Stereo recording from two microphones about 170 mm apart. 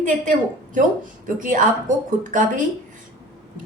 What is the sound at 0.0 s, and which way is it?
Speech, 50° right (ahead or behind).